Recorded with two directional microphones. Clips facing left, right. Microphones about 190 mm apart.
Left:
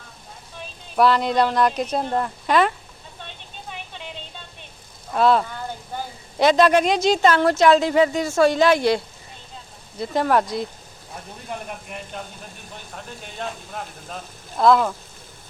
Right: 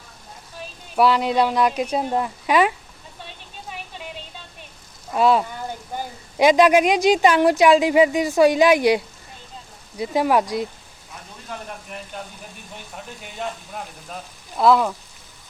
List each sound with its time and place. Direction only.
0.9 s speech: 10° right (ahead or behind)
5.1 s speech: 10° right (ahead or behind)
11.5 s speech: 20° left (ahead or behind)
14.6 s speech: 5° right (ahead or behind)